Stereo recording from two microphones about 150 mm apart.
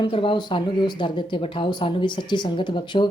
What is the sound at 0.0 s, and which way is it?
Speech, 35° left (ahead or behind).